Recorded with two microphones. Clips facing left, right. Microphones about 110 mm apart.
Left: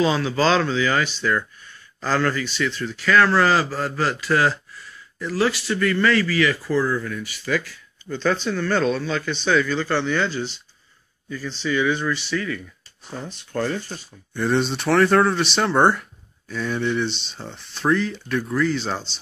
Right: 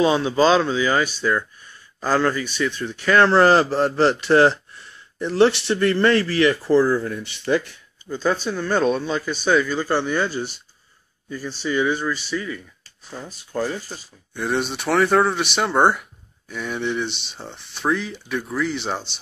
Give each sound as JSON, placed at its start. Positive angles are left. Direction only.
{"t": 0.0, "sound": "a man's voice", "side_deg": -20}
{"t": 8.1, "sound": "speech", "side_deg": -10}
{"t": 13.5, "sound": "speech", "side_deg": -10}